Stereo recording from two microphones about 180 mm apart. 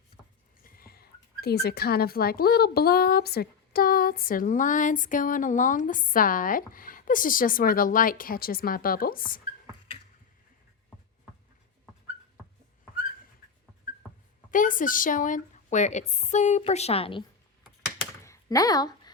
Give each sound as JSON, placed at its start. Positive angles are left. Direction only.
{"t": 0.6, "sound": "speech", "side_deg": 55}
{"t": 14.5, "sound": "a woman's voice", "side_deg": 45}
{"t": 18.2, "sound": "a sound", "side_deg": 20}